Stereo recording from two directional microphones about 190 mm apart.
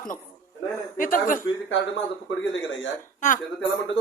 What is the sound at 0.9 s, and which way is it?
Speech, 45° left (ahead or behind).